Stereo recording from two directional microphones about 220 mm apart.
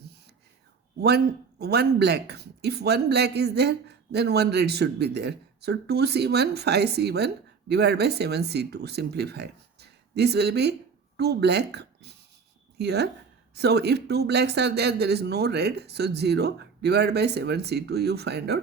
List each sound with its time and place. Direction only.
1.0 s speech: 45° right (ahead or behind)